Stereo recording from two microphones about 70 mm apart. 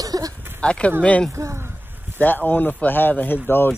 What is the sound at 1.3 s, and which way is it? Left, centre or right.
Speech, right.